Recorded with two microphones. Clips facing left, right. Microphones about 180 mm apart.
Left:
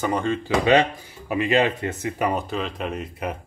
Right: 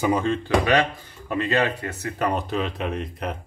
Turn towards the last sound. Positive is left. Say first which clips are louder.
# even
turn(degrees=5)  # may be behind; listen again after turning